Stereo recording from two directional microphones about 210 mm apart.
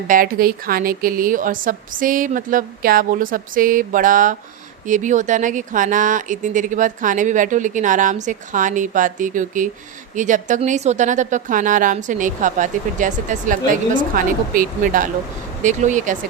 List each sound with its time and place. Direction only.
0.1 s speech: 45° right (ahead or behind)